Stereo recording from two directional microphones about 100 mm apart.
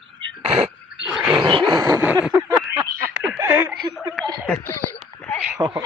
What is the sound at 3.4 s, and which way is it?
Speech, 20° right (ahead or behind).